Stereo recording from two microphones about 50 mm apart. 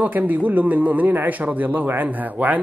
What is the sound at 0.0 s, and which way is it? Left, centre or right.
A man's voice, right.